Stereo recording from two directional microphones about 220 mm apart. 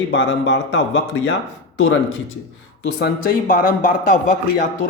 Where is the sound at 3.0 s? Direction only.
40° left (ahead or behind).